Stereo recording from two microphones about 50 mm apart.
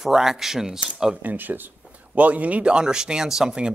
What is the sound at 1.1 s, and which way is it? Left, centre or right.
Speech, right.